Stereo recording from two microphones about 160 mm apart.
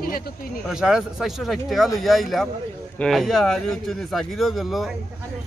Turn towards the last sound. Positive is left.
turn(degrees=0)  # may be behind; listen again after turning